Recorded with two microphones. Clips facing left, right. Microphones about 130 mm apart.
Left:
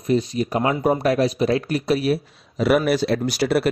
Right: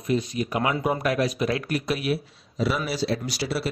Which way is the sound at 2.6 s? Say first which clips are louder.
Left 8 dB; 60° left (ahead or behind).